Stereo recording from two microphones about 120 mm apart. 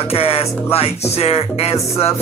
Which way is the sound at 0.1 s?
55° left (ahead or behind).